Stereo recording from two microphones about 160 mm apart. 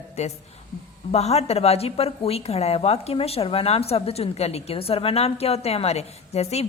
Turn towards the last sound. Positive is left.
turn(degrees=40)  # may be behind; listen again after turning